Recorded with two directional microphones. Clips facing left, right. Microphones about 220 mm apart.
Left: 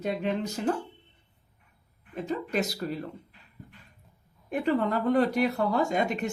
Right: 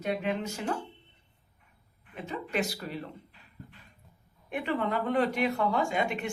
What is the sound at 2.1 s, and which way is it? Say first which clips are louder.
Speech: left 3 dB; 40° left (ahead or behind).